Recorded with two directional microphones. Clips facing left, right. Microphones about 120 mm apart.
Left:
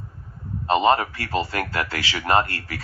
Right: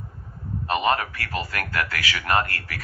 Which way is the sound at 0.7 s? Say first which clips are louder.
Left 4 dB; 25° left (ahead or behind).